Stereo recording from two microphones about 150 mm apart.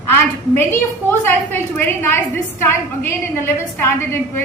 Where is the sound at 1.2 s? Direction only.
15° left (ahead or behind).